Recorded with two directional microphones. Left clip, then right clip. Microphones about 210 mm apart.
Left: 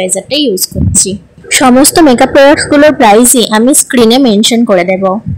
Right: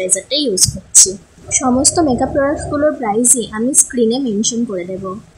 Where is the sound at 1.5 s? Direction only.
40° left (ahead or behind).